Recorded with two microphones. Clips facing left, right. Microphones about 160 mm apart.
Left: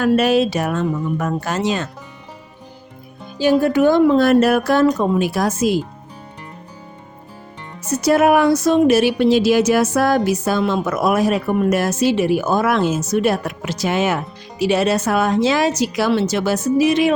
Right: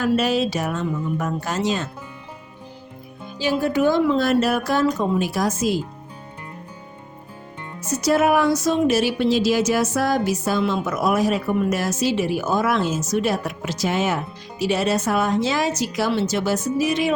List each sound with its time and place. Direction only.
0.0 s speech: 60° left (ahead or behind)
3.3 s speech: 55° left (ahead or behind)
7.9 s speech: 60° left (ahead or behind)